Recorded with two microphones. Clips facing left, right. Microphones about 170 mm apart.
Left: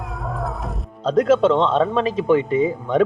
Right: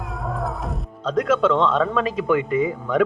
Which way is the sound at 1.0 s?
30° left (ahead or behind).